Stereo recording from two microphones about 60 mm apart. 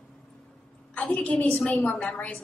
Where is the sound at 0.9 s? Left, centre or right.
Left.